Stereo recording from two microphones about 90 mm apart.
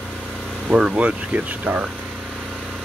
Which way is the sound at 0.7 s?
5° right (ahead or behind).